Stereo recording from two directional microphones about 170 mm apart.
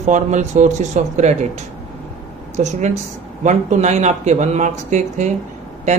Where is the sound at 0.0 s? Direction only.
45° right (ahead or behind).